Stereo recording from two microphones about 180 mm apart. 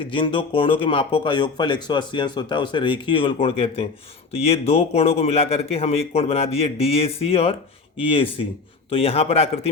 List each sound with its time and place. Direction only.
0.0 s a man's voice: 25° left (ahead or behind)